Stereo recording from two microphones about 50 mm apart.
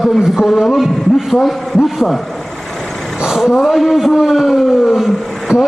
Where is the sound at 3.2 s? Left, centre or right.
Centre.